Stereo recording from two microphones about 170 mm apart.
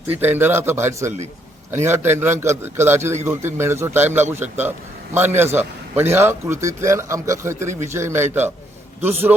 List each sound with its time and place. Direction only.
0.1 s a man's voice: 10° right (ahead or behind)